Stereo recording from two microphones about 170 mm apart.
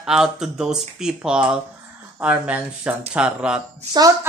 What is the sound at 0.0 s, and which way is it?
A woman's voice, 5° right (ahead or behind).